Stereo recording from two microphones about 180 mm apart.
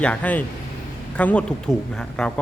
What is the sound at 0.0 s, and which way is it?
A man's voice, 5° left (ahead or behind).